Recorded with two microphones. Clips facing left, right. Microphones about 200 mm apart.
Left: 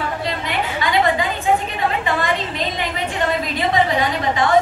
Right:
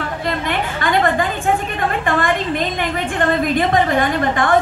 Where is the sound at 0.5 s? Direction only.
50° right (ahead or behind).